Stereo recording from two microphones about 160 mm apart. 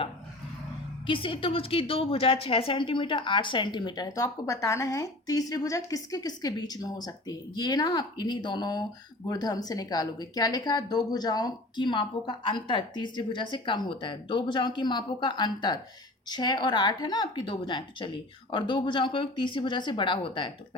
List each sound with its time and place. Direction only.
1.0 s a woman's voice: 30° left (ahead or behind)